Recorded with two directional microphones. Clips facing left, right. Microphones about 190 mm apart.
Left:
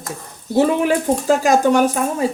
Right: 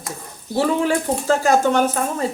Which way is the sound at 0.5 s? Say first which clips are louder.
Left 3 dB; 15° left (ahead or behind).